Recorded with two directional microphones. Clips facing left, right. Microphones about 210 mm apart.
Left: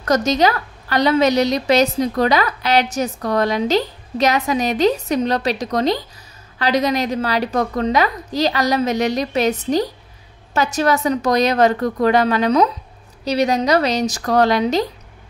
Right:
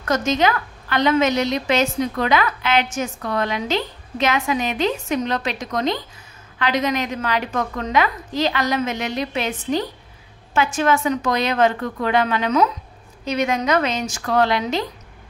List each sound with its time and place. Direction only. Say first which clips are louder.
0.0 s a woman's voice: left 3 dB; 35° left (ahead or behind)